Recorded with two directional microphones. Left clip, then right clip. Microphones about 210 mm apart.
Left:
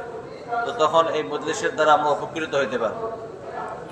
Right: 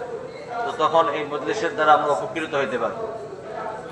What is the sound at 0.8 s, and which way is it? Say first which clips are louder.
Speech: even; 10° right (ahead or behind).